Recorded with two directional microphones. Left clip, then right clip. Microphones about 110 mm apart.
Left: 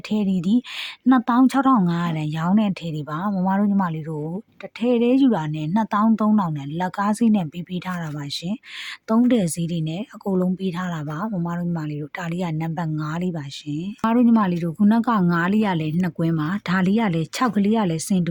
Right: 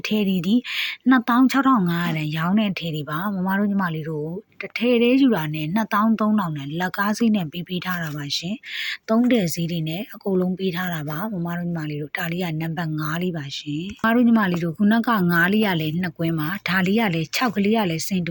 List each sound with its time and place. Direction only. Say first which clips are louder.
0.1 s speech: left 1 dB; 25° left (ahead or behind)